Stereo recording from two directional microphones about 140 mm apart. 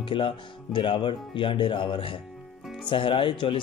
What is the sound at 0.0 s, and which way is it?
Speech, 35° left (ahead or behind).